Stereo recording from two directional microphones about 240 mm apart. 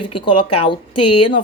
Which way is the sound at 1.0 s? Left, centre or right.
Left.